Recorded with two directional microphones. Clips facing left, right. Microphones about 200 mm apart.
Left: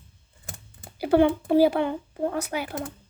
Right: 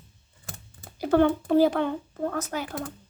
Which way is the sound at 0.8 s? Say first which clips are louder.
Left 1 dB; 5° left (ahead or behind).